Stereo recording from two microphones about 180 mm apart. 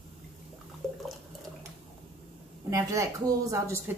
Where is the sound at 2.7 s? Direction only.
15° right (ahead or behind).